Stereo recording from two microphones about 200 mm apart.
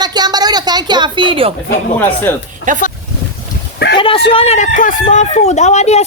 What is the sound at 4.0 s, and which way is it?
Speech, 25° left (ahead or behind).